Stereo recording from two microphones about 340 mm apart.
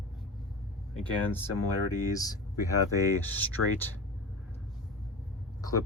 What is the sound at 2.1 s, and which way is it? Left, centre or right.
Speech, centre.